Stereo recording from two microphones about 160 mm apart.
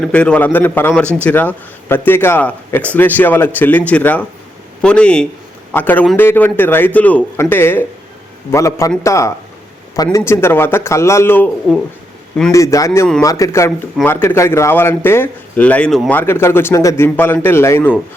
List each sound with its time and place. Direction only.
0.0 s speech: 5° left (ahead or behind)
12.5 s speech: 20° left (ahead or behind)